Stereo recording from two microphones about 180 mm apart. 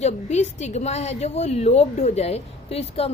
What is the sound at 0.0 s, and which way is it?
A woman's voice, 40° left (ahead or behind).